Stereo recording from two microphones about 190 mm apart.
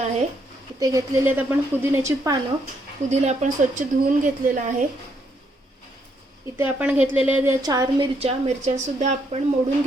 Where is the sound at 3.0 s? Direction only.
35° right (ahead or behind).